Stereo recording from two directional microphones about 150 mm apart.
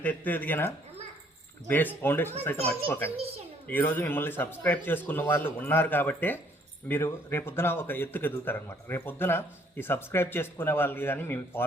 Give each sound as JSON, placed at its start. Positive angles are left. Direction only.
{"t": 0.0, "sound": "a man's voice", "side_deg": 10}
{"t": 3.2, "sound": "a child's voice", "side_deg": -40}
{"t": 3.7, "sound": "a man's voice", "side_deg": 15}